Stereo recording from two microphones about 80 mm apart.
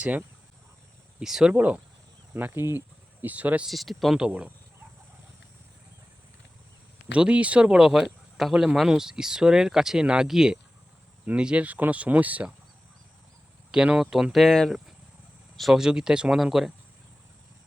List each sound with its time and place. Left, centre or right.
0.0 s speech: centre
1.2 s speech: centre
1.5 s speech: centre
3.7 s speech: centre
4.2 s speech: centre
7.1 s speech: centre
13.7 s speech: centre
14.4 s speech: centre